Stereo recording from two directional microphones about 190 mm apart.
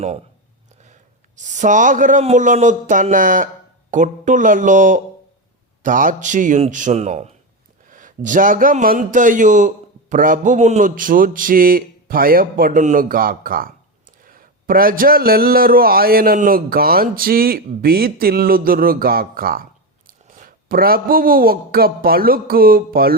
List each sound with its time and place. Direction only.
1.4 s a man's voice: 40° right (ahead or behind)